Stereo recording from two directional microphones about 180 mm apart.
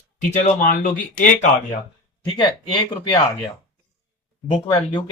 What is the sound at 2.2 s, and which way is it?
Speech, 25° left (ahead or behind).